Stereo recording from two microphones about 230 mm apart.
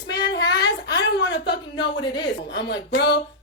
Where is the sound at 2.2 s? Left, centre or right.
Left.